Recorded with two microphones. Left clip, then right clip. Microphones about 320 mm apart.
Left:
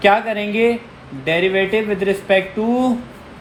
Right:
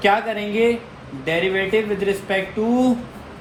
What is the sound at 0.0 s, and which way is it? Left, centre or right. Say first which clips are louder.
A man's voice: left 4 dB; left.